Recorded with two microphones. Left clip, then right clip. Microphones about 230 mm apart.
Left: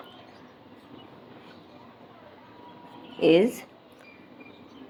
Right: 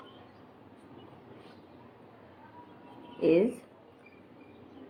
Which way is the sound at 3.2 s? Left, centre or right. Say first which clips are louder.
Left 5 dB; left.